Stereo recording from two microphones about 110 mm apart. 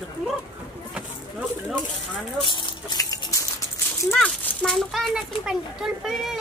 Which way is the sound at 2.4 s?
45° left (ahead or behind).